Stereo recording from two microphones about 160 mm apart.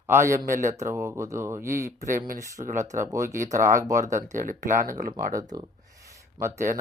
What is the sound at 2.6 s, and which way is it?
Speech, 55° right (ahead or behind).